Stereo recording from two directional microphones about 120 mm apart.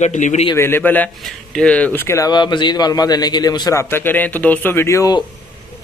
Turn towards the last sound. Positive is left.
turn(degrees=25)  # may be behind; listen again after turning